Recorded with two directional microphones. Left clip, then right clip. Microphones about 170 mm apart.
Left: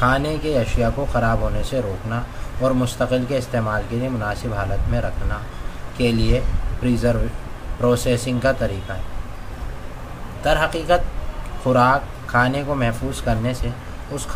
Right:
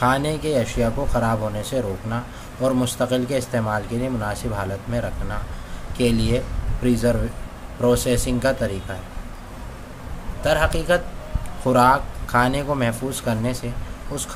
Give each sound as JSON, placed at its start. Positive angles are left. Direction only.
{"t": 0.0, "sound": "speech", "side_deg": -20}
{"t": 10.4, "sound": "speech", "side_deg": -20}